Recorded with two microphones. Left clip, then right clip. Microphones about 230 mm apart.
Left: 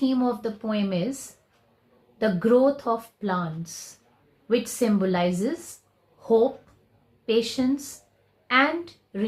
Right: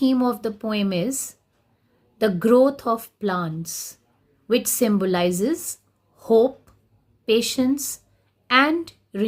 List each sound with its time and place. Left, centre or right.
0.0 s speech: right
2.1 s speech: right
6.1 s a sound: right
7.3 s speech: right